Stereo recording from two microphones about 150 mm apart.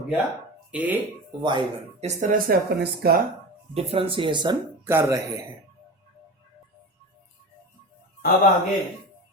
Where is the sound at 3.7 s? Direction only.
40° right (ahead or behind).